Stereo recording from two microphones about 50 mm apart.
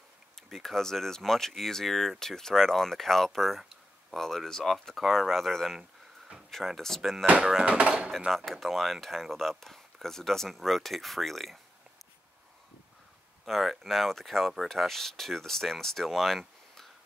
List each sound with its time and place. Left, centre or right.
0.4 s speech: centre
5.8 s a sound: centre
6.5 s speech: centre
7.6 s speech: right
8.3 s speech: centre
13.5 s speech: centre